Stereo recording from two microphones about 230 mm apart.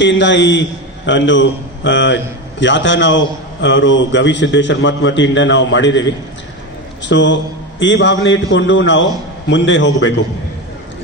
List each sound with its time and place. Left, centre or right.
0.0 s a man's voice: left